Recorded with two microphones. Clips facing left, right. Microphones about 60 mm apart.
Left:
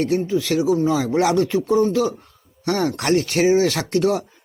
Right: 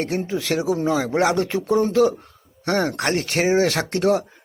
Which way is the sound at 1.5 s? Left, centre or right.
Right.